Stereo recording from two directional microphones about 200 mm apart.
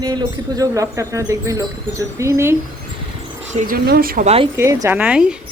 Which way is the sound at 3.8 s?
50° right (ahead or behind).